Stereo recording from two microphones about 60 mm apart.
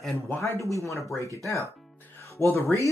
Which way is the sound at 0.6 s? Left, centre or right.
Right.